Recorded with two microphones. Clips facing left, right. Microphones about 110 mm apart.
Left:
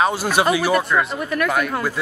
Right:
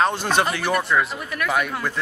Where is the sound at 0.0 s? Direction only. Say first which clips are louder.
Left 2 dB; 5° left (ahead or behind).